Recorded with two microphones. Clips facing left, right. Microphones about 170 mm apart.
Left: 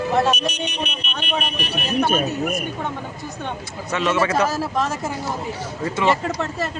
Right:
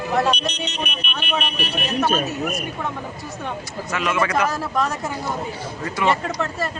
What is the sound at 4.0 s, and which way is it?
Speech, 25° left (ahead or behind).